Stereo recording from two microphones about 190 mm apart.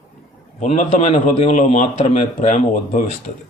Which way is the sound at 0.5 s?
35° left (ahead or behind).